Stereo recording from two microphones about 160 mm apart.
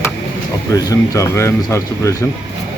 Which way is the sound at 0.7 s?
20° left (ahead or behind).